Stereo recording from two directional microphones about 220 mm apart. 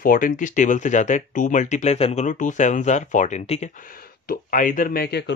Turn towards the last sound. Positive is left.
turn(degrees=50)  # may be behind; listen again after turning